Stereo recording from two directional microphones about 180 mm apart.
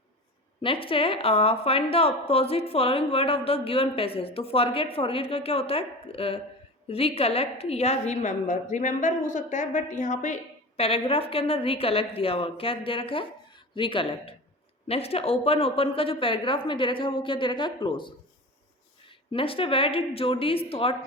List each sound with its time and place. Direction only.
0.6 s a woman's voice: 30° left (ahead or behind)